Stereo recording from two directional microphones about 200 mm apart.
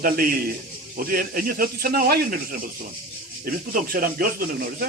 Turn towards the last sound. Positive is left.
turn(degrees=-45)  # may be behind; listen again after turning